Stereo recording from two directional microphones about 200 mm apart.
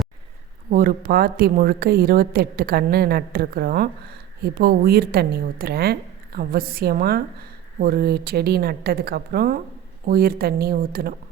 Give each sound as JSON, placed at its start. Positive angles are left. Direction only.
{"t": 0.7, "sound": "a woman's voice", "side_deg": -45}